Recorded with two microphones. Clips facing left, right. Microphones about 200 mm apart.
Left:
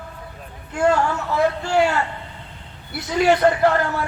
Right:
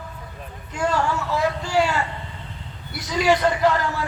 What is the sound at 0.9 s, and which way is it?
Speech, 55° left (ahead or behind).